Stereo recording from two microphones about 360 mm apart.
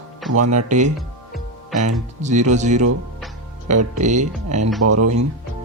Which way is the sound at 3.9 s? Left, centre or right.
Centre.